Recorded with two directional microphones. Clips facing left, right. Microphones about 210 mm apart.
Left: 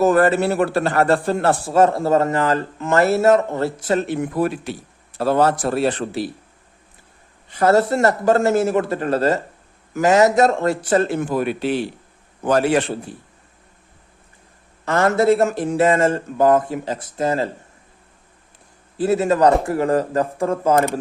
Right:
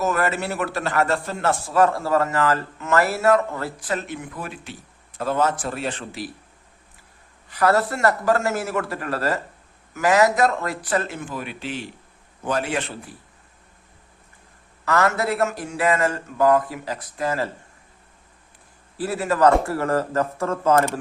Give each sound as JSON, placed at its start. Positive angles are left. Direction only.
{"t": 0.0, "sound": "a man's voice", "side_deg": 35}
{"t": 7.5, "sound": "a man's voice", "side_deg": 25}
{"t": 11.2, "sound": "a man's voice", "side_deg": 50}
{"t": 14.8, "sound": "a man's voice", "side_deg": 30}
{"t": 18.9, "sound": "a man's voice", "side_deg": 25}